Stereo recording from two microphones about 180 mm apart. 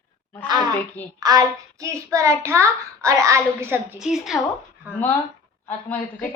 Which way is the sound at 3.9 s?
Centre (ahead or behind).